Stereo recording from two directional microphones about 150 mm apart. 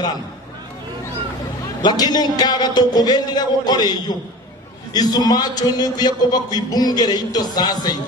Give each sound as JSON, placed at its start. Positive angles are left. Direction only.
{"t": 1.8, "sound": "a man's voice", "side_deg": 30}